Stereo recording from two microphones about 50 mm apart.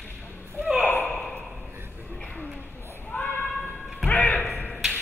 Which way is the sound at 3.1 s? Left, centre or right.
Left.